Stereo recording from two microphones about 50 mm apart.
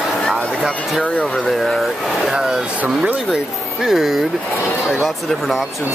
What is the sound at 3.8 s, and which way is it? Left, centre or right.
Speech, centre.